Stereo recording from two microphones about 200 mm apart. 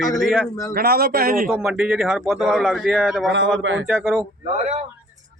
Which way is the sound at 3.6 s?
70° right (ahead or behind).